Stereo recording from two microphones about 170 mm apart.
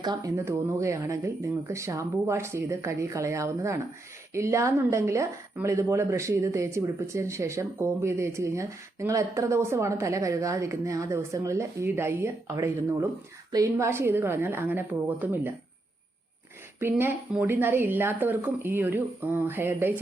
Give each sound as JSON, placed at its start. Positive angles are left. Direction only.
{"t": 0.0, "sound": "a woman's voice", "side_deg": -20}
{"t": 16.8, "sound": "a woman's voice", "side_deg": -15}